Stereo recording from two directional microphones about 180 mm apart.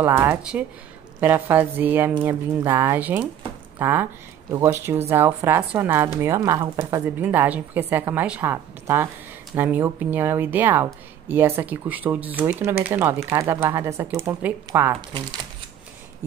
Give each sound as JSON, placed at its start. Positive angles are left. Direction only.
{"t": 0.0, "sound": "speech", "side_deg": -10}
{"t": 7.2, "sound": "speech", "side_deg": -10}